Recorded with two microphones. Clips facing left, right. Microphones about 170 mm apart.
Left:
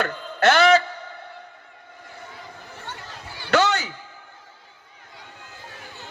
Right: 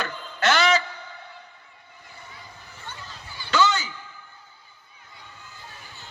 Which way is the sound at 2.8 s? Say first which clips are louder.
Left 2 dB; 70° left (ahead or behind).